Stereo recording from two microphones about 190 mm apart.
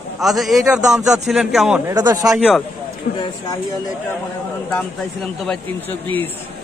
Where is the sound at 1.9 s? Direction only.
15° right (ahead or behind).